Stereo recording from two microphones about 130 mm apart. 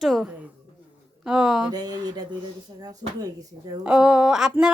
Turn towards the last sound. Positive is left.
turn(degrees=-5)  # may be behind; listen again after turning